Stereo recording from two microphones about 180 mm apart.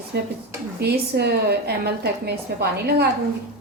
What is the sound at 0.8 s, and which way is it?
A woman's voice, 65° right (ahead or behind).